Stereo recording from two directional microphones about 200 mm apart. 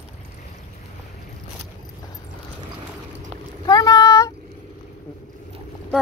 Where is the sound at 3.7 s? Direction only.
20° left (ahead or behind).